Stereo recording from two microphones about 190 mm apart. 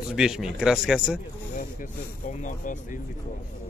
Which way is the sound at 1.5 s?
40° left (ahead or behind).